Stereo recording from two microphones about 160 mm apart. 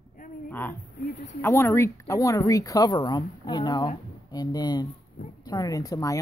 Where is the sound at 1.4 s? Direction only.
15° left (ahead or behind).